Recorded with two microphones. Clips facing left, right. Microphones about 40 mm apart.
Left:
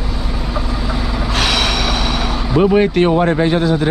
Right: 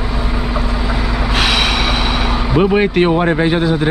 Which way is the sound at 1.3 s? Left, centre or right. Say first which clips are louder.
Right 1 dB; centre.